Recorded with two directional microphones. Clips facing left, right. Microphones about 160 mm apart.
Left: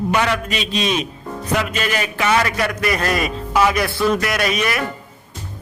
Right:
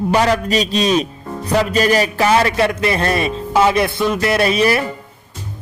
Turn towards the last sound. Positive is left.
turn(degrees=-30)  # may be behind; listen again after turning